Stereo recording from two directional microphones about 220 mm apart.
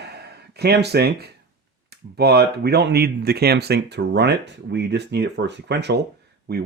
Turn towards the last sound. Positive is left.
turn(degrees=-45)  # may be behind; listen again after turning